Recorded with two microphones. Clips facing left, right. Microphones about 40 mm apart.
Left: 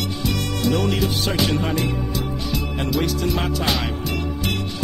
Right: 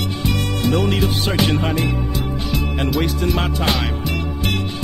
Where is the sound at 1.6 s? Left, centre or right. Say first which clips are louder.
Right 2 dB; centre.